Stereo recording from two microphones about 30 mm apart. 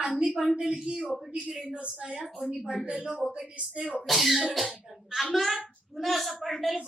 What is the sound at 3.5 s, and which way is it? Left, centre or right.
Speech, right.